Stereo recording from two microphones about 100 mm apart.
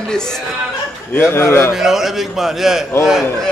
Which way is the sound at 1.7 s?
5° right (ahead or behind).